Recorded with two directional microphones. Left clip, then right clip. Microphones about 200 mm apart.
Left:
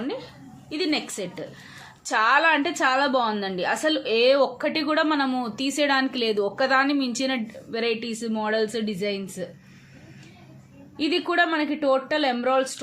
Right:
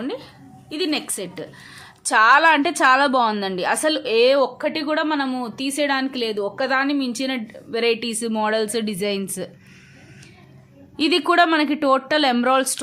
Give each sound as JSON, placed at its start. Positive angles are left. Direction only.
{"t": 0.0, "sound": "a sound", "side_deg": -20}
{"t": 0.7, "sound": "speech", "side_deg": -15}
{"t": 10.9, "sound": "speech", "side_deg": -30}